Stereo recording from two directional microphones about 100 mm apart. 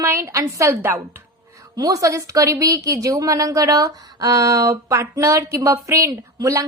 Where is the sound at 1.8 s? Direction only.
35° right (ahead or behind).